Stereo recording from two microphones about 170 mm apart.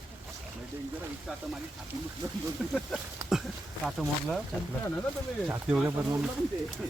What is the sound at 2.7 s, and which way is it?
Speech, 5° right (ahead or behind).